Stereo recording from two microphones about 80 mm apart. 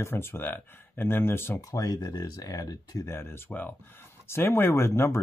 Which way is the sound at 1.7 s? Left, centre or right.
Left.